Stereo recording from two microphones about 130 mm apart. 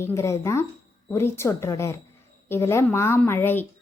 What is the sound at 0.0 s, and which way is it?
A woman's voice, 20° left (ahead or behind).